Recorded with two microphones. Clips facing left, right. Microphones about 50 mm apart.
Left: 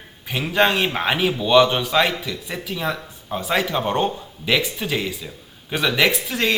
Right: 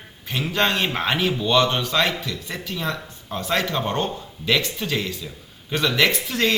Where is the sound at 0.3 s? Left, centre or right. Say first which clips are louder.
Left 3 dB; centre.